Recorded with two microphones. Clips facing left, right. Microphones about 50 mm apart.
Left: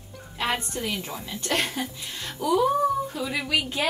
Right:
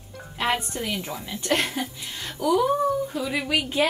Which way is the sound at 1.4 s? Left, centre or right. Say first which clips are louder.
Right 2 dB; right.